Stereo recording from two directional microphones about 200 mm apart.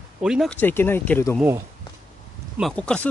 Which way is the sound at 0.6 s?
10° left (ahead or behind).